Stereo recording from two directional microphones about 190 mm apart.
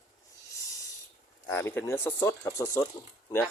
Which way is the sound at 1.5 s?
10° left (ahead or behind).